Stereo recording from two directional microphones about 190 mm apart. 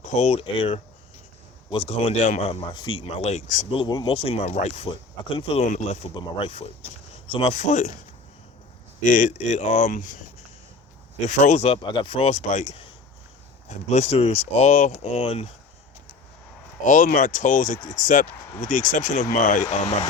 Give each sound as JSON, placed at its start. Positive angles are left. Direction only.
{"t": 0.0, "sound": "speech", "side_deg": 35}
{"t": 3.7, "sound": "speech", "side_deg": 25}
{"t": 9.0, "sound": "speech", "side_deg": 40}
{"t": 11.3, "sound": "speech", "side_deg": 40}
{"t": 16.8, "sound": "speech", "side_deg": 45}